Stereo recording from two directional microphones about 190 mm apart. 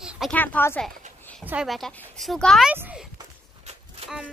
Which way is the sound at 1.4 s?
5° right (ahead or behind).